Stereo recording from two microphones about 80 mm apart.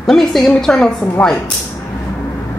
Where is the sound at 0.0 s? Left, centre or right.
Centre.